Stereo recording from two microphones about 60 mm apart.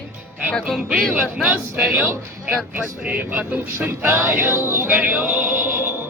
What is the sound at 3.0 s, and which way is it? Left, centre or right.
Speech, right.